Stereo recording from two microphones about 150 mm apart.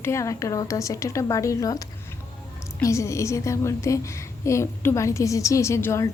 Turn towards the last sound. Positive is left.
turn(degrees=15)  # may be behind; listen again after turning